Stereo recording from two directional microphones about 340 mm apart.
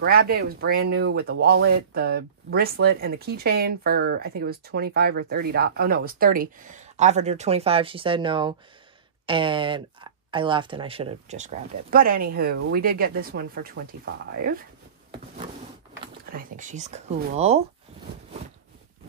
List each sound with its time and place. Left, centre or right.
0.0 s speech: right
16.3 s speech: right